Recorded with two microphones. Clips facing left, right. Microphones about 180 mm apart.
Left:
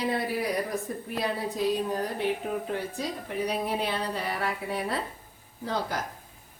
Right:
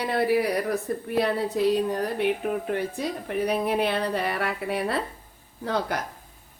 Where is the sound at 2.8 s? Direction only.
60° right (ahead or behind).